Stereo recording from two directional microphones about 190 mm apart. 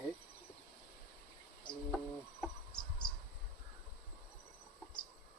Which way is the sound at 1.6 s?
5° left (ahead or behind).